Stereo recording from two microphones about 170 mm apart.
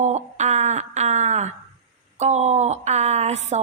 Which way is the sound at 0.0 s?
45° right (ahead or behind).